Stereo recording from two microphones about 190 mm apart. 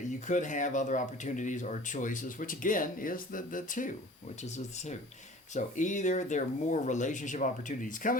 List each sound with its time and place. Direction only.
0.3 s speech: 40° left (ahead or behind)